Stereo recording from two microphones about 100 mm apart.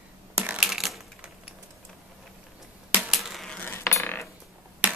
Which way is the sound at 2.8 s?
15° right (ahead or behind).